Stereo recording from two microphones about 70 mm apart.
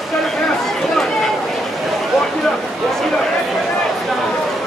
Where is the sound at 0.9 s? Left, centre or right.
Centre.